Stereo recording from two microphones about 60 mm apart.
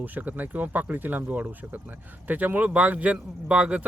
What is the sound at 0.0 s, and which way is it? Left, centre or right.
Speech, right.